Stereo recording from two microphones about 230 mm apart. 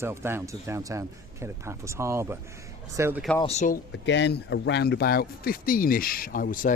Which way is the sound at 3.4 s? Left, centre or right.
Left.